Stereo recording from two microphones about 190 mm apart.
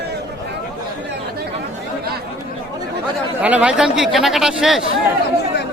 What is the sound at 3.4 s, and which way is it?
Speech, 5° right (ahead or behind).